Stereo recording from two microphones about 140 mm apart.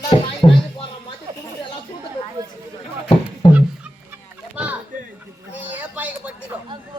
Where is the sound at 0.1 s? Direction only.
35° left (ahead or behind).